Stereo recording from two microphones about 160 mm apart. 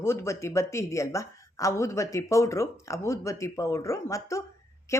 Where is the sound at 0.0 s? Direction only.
15° left (ahead or behind).